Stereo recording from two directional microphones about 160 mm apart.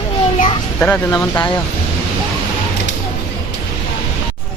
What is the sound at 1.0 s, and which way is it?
Speech, 15° left (ahead or behind).